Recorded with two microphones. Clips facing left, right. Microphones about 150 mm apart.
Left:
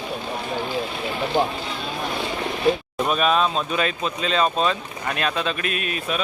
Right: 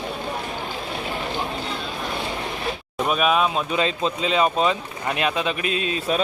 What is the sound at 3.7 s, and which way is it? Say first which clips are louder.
Speech: right 2 dB; 20° right (ahead or behind).